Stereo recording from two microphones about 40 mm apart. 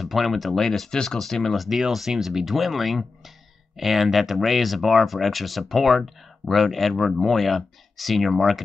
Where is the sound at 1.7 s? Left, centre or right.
Centre.